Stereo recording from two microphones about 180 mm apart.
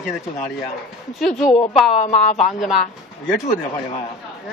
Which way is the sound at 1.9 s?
40° left (ahead or behind).